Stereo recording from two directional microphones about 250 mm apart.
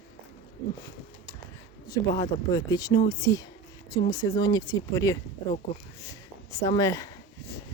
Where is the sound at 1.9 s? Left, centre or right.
Centre.